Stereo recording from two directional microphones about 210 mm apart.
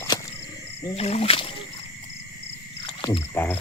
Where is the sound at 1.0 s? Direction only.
30° left (ahead or behind).